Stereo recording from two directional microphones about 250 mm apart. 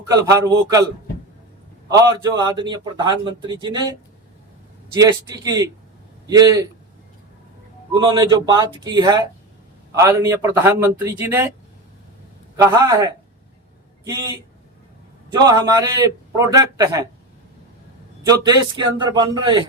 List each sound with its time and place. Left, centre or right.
0.3 s a man's voice: centre
1.9 s a man's voice: centre
4.9 s a man's voice: centre
7.9 s a man's voice: centre
12.5 s a man's voice: centre
18.2 s a man's voice: centre